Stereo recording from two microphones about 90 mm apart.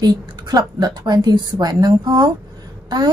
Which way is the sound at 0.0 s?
45° right (ahead or behind).